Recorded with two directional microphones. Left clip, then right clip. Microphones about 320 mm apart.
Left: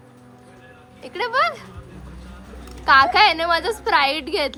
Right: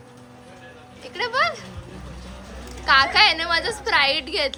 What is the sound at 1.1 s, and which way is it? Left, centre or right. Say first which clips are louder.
Speech: left 2 dB; left.